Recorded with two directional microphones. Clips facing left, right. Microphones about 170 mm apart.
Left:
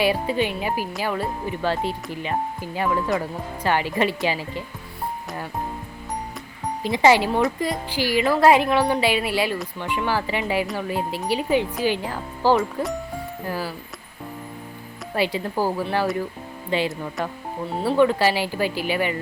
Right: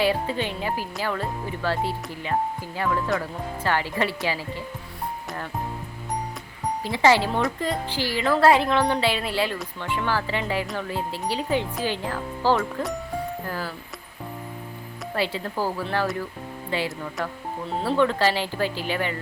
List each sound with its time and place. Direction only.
0.0 s speech: 15° left (ahead or behind)
6.8 s speech: 15° left (ahead or behind)
15.1 s speech: 15° left (ahead or behind)